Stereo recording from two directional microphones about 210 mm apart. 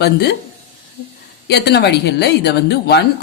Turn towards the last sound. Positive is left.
turn(degrees=50)  # may be behind; listen again after turning